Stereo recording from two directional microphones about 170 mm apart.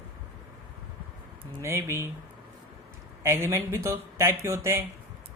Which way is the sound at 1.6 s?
15° right (ahead or behind).